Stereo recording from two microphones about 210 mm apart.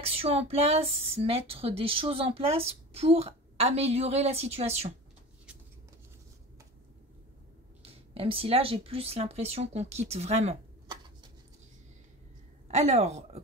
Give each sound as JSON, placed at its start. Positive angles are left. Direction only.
{"t": 0.0, "sound": "speech", "side_deg": -30}
{"t": 7.8, "sound": "speech", "side_deg": -25}
{"t": 12.7, "sound": "a woman's voice", "side_deg": -30}